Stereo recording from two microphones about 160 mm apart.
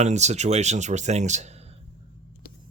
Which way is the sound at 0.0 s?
45° right (ahead or behind).